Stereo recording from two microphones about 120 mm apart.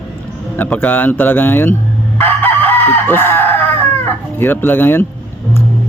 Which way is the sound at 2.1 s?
15° left (ahead or behind).